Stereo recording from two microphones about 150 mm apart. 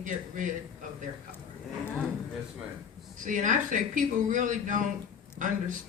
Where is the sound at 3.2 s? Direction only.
60° right (ahead or behind).